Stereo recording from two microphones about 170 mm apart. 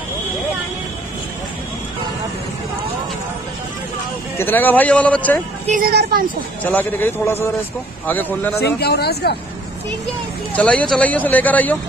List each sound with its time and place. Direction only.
4.4 s speech: 10° left (ahead or behind)
5.7 s speech: 60° right (ahead or behind)
6.6 s speech: 10° left (ahead or behind)
8.5 s speech: 70° left (ahead or behind)
10.5 s speech: 10° left (ahead or behind)